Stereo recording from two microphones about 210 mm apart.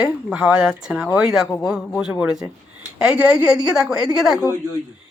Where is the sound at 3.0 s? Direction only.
5° right (ahead or behind).